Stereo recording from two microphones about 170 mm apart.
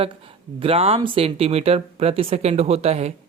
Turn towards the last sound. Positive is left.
turn(degrees=-40)  # may be behind; listen again after turning